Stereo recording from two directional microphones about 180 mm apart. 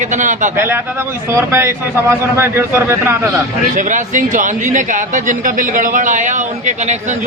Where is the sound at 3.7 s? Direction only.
45° right (ahead or behind).